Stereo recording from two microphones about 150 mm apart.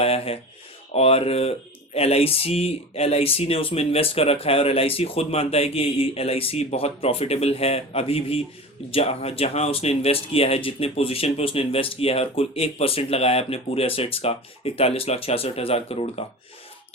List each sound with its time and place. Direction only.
0.0 s speech: 40° left (ahead or behind)